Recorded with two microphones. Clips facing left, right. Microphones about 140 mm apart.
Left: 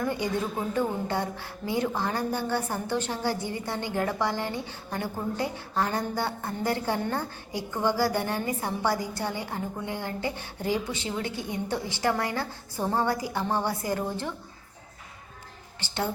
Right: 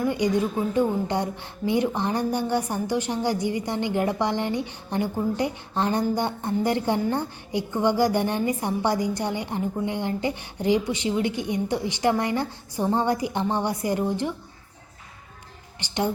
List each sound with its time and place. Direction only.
0.0 s a woman's voice: 15° right (ahead or behind)
15.8 s a woman's voice: 15° right (ahead or behind)